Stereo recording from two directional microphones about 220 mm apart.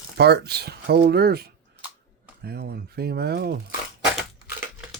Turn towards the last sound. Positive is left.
turn(degrees=-10)  # may be behind; listen again after turning